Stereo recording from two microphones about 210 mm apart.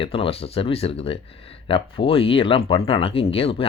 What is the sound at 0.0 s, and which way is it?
Speech, 25° left (ahead or behind).